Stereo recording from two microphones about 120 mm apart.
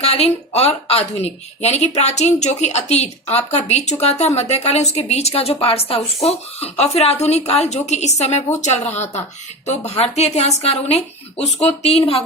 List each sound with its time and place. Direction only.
0.0 s a woman's voice: 60° left (ahead or behind)